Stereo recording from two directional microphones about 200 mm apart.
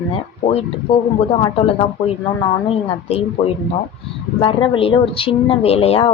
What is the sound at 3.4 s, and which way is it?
Speech, 30° left (ahead or behind).